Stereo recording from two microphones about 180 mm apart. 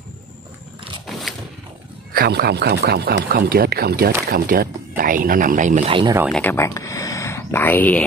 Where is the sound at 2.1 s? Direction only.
60° right (ahead or behind); by 5.9 s 45° right (ahead or behind).